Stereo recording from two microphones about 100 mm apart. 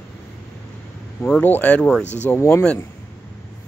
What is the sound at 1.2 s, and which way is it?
Speech, 15° left (ahead or behind).